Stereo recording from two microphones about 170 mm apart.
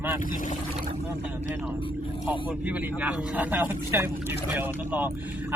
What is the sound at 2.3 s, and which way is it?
Speech, 10° right (ahead or behind).